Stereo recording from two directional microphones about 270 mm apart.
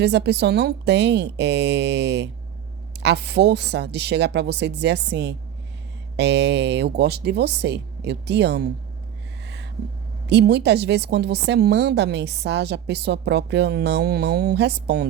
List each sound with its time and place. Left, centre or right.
0.0 s a woman's voice: right
10.2 s a woman's voice: right